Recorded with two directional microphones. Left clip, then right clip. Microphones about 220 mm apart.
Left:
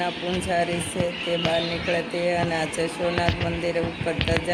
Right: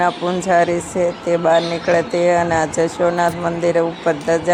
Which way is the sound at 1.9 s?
15° right (ahead or behind).